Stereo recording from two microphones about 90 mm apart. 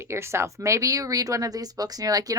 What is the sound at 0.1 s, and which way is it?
Speech, 30° right (ahead or behind).